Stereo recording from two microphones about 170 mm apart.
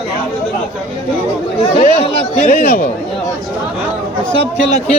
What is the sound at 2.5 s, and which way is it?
Speech, 60° left (ahead or behind).